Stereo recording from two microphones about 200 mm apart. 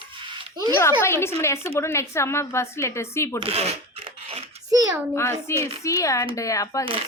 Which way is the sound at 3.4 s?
30° right (ahead or behind).